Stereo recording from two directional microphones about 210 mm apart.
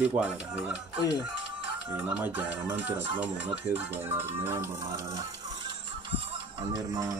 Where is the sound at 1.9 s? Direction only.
10° right (ahead or behind).